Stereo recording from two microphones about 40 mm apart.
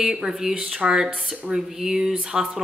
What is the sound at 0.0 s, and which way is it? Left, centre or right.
Speech, centre.